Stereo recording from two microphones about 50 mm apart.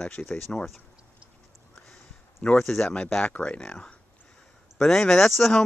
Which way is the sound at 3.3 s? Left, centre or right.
Left.